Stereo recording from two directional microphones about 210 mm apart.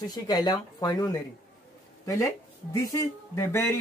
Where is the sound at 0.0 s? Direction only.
20° left (ahead or behind).